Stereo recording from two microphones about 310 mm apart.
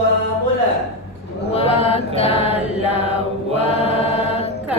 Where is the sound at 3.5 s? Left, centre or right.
Right.